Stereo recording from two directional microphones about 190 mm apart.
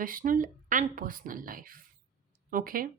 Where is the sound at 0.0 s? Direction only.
45° right (ahead or behind).